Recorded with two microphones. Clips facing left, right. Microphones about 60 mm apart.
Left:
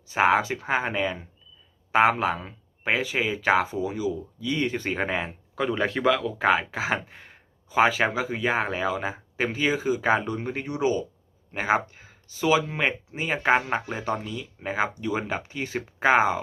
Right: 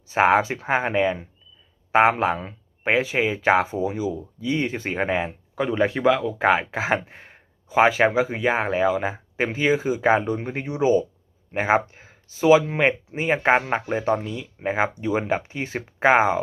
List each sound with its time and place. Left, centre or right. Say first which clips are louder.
0.1 s speech: right 3 dB; right
6.5 s speech: right 2 dB; right